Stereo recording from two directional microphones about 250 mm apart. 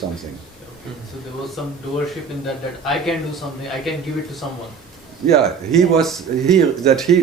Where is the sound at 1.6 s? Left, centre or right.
Centre.